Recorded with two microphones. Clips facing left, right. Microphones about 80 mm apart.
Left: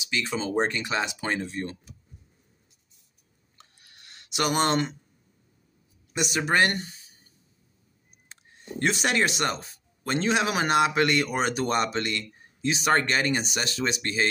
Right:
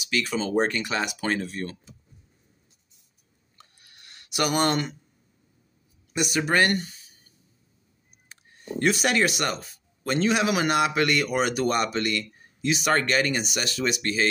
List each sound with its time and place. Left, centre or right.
0.1 s speech: left
3.8 s a sound: left
6.4 s speech: left
9.0 s speech: left